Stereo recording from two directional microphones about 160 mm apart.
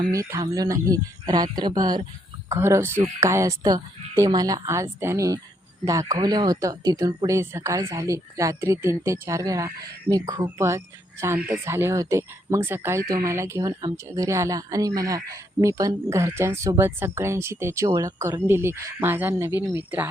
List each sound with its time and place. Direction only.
0.1 s speech: 20° right (ahead or behind)